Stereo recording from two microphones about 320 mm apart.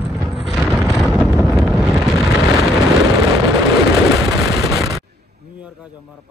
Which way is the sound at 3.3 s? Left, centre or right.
Centre.